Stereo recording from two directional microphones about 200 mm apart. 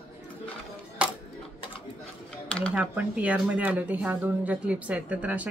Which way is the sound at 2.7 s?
5° right (ahead or behind).